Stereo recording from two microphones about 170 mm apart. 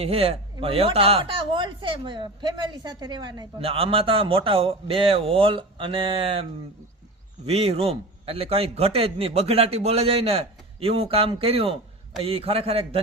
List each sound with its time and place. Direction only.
0.0 s speech: 35° right (ahead or behind)
7.4 s speech: 35° right (ahead or behind)